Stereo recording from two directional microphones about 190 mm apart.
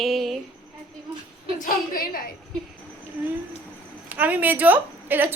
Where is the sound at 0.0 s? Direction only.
Centre (ahead or behind).